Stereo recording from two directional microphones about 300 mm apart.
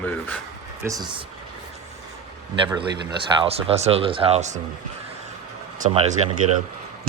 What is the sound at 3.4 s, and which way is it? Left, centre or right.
Speech, centre.